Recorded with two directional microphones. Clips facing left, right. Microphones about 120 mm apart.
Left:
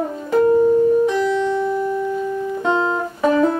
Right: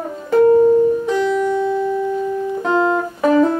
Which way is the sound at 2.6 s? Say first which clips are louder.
Right 3 dB; centre (ahead or behind).